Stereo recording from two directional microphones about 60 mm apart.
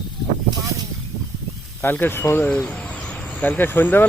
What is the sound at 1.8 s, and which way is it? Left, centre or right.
Speech, left.